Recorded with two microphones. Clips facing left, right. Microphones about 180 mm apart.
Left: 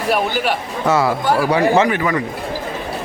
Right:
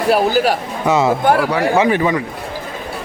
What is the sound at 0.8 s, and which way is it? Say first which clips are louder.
Speech: right 1 dB; 20° right (ahead or behind).